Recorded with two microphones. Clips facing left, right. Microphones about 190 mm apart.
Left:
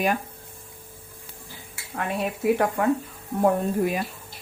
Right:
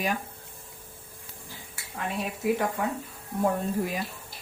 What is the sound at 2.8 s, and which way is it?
Speech, 45° left (ahead or behind).